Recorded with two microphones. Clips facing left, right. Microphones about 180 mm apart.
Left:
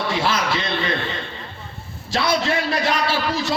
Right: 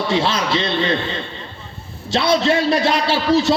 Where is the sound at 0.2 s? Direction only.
25° right (ahead or behind).